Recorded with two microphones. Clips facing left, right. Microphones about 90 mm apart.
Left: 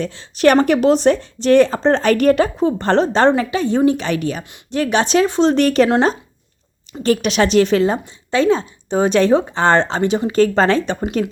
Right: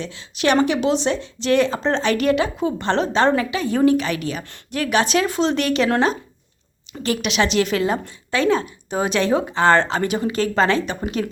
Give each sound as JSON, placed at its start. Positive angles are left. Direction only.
{"t": 0.0, "sound": "a woman's voice", "side_deg": 40}
{"t": 7.0, "sound": "a woman's voice", "side_deg": 40}